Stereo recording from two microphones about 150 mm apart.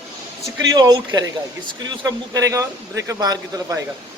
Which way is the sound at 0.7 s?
25° right (ahead or behind).